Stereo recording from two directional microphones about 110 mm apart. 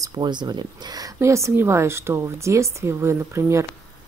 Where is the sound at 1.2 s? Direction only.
25° right (ahead or behind).